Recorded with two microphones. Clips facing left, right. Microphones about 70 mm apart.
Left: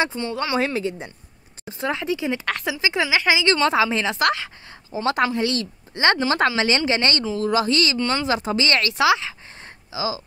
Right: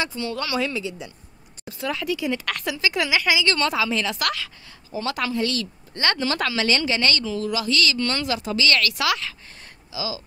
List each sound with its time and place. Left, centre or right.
0.0 s a woman's voice: left
1.7 s a woman's voice: left